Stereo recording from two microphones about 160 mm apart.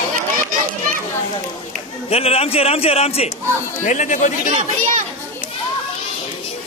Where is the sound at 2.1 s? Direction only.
40° left (ahead or behind).